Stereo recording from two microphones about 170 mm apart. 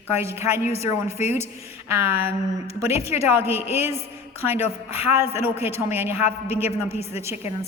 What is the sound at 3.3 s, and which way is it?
Speech, 10° right (ahead or behind).